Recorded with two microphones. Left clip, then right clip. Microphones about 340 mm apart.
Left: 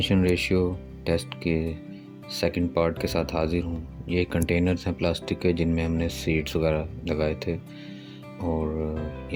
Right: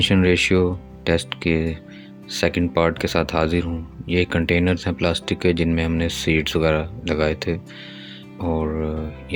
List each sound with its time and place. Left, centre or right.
0.0 s speech: left